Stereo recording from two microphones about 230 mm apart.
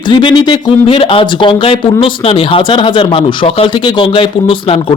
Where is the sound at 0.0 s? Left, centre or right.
Left.